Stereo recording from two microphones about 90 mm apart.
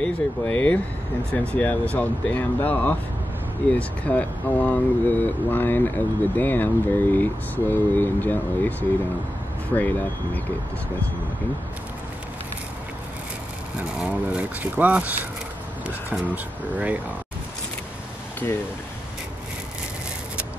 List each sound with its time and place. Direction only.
0.0 s speech: 15° left (ahead or behind)
9.8 s speech: 20° left (ahead or behind)
13.7 s speech: 15° right (ahead or behind)